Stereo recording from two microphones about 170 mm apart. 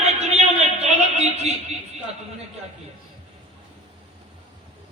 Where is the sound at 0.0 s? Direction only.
40° right (ahead or behind).